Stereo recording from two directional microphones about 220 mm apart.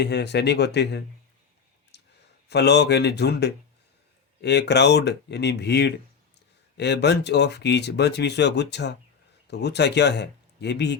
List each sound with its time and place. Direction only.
0.0 s speech: 50° left (ahead or behind)
1.9 s a sound: 50° left (ahead or behind)
2.5 s speech: 50° left (ahead or behind)